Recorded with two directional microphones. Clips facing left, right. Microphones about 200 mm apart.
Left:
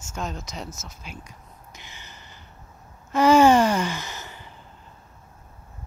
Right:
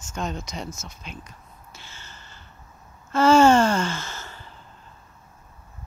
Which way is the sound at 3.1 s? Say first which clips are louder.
Even; 15° left (ahead or behind).